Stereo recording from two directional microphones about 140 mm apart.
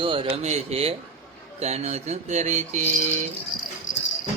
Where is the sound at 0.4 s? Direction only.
50° right (ahead or behind).